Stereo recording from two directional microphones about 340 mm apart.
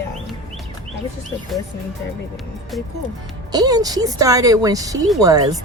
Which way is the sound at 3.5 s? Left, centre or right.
Centre.